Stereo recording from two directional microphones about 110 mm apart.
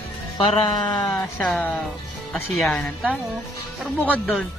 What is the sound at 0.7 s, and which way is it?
Speech, 40° left (ahead or behind).